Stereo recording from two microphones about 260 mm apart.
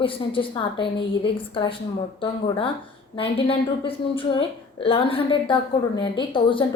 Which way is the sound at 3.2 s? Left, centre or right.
Left.